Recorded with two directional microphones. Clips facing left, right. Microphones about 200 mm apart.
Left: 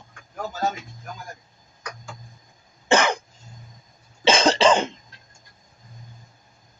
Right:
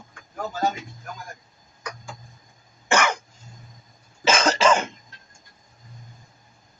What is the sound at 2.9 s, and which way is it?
Cough, 20° left (ahead or behind).